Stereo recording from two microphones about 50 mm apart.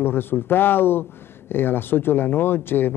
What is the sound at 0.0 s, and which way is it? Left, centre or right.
Speech, left.